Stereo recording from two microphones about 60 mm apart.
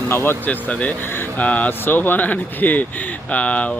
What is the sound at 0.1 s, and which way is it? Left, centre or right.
Speech, left.